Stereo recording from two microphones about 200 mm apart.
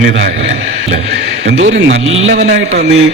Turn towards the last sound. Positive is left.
turn(degrees=-35)  # may be behind; listen again after turning